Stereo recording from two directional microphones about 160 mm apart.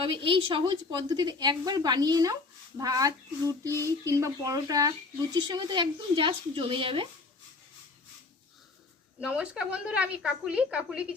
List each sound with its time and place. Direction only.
0.0 s a woman's voice: 35° right (ahead or behind)
9.2 s a woman's voice: 5° right (ahead or behind)